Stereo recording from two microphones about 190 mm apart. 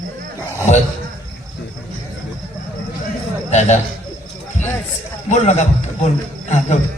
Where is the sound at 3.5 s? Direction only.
40° left (ahead or behind).